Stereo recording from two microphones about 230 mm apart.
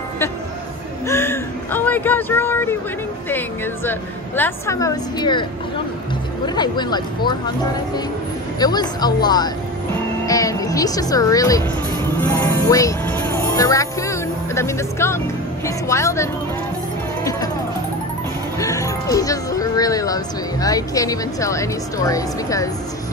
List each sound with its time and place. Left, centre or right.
1.0 s speech: centre
6.4 s speech: centre
8.5 s speech: centre
17.2 s music: centre
18.6 s music: centre
20.6 s speech: centre